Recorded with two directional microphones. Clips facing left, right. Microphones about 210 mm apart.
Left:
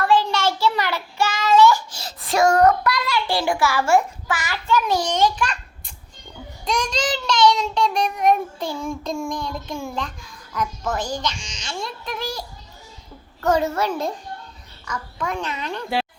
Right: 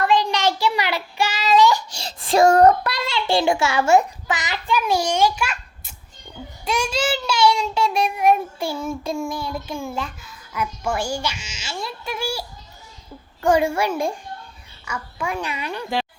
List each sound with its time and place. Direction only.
0.0 s child singing: 15° right (ahead or behind)
2.0 s a child's voice: 30° right (ahead or behind); by 15.9 s 10° right (ahead or behind)